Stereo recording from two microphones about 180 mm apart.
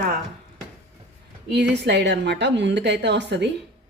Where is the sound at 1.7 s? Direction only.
70° right (ahead or behind).